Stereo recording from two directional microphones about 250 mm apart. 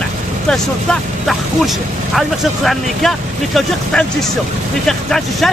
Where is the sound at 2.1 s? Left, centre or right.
Centre.